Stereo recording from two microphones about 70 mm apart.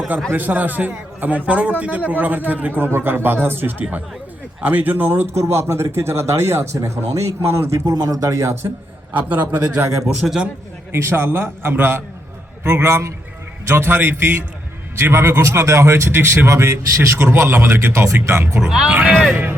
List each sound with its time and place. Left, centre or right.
0.3 s a man's voice: right
5.3 s a man's voice: right
7.9 s speech: right
9.1 s a man's voice: right
9.7 s a man's voice: right
10.0 s speech: centre
10.9 s a man's voice: right
18.6 s speech: centre
19.1 s speech: centre